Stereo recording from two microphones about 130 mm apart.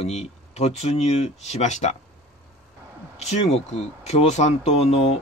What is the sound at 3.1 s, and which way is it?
Speech, 55° left (ahead or behind).